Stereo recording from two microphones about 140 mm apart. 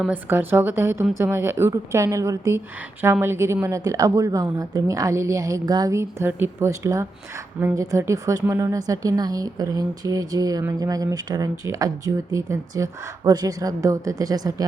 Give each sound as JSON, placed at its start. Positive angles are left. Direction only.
{"t": 0.1, "sound": "a woman's voice", "side_deg": -15}